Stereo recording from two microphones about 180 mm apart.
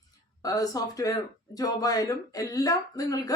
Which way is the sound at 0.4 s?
20° left (ahead or behind).